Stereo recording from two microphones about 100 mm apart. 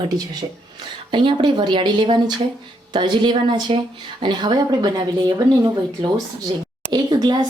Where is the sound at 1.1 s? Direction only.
55° right (ahead or behind).